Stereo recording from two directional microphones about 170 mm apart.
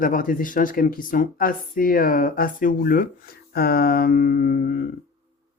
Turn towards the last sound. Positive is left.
turn(degrees=60)  # may be behind; listen again after turning